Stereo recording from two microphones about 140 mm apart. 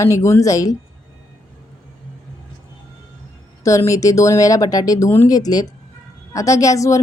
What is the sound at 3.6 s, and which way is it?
A woman's voice, 20° left (ahead or behind).